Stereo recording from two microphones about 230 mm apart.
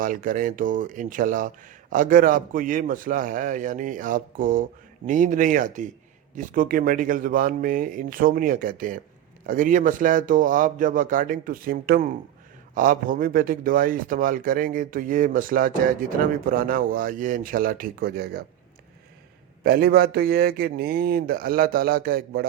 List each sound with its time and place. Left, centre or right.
0.0 s speech: right
19.6 s speech: right